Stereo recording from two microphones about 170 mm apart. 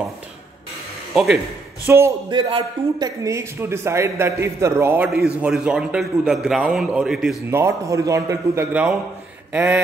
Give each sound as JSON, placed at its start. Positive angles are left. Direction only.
{"t": 1.1, "sound": "a man's voice", "side_deg": 0}
{"t": 1.9, "sound": "a man's voice", "side_deg": -15}
{"t": 2.2, "sound": "speech", "side_deg": -30}
{"t": 3.3, "sound": "a man's voice", "side_deg": -15}
{"t": 7.5, "sound": "a man's voice", "side_deg": -15}
{"t": 9.5, "sound": "a sound", "side_deg": -10}